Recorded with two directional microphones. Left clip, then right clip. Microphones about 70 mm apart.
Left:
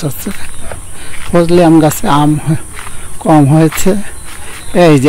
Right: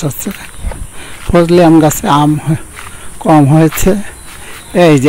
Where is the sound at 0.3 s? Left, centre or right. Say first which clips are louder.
Even; centre.